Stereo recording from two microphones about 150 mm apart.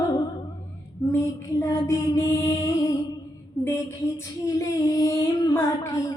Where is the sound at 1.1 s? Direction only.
20° left (ahead or behind).